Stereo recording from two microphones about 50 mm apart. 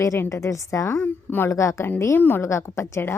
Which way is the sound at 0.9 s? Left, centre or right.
Left.